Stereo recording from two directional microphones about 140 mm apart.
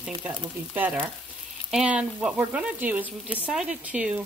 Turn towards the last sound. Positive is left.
turn(degrees=-10)  # may be behind; listen again after turning